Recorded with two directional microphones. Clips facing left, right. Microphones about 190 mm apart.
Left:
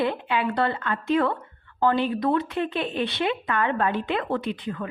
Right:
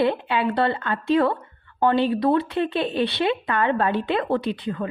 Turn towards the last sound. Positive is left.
turn(degrees=-30)  # may be behind; listen again after turning